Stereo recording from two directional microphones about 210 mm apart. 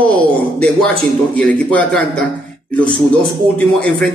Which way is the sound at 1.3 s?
5° left (ahead or behind).